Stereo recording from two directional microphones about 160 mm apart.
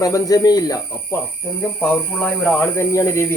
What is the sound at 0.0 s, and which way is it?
Speech, 20° left (ahead or behind).